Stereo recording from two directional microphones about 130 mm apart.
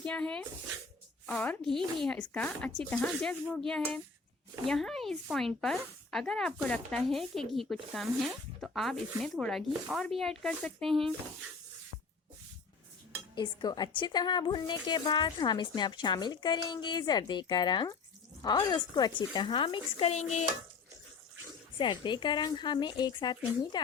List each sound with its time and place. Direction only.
0.0 s speech: 10° left (ahead or behind)
1.5 s speech: 5° left (ahead or behind)
13.3 s a woman's voice: 35° left (ahead or behind); by 20.2 s 55° left (ahead or behind)
21.8 s a woman's voice: 35° left (ahead or behind)